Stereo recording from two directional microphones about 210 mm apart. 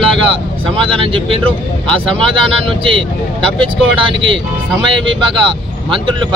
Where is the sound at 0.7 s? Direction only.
25° right (ahead or behind).